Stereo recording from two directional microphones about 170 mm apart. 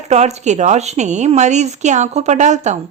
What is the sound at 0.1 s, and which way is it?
A woman's voice, 40° right (ahead or behind).